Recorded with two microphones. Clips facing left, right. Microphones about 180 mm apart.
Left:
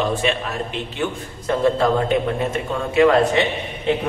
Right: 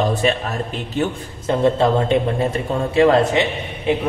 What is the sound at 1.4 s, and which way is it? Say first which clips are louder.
A man's voice: right 2 dB; 25° right (ahead or behind).